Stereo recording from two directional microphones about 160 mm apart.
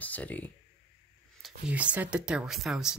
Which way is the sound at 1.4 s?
5° right (ahead or behind).